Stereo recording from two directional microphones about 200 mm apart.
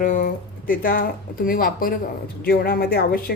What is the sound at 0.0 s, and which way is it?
Speech, 40° left (ahead or behind).